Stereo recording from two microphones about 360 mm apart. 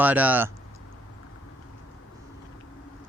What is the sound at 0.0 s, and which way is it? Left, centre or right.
Speech, centre.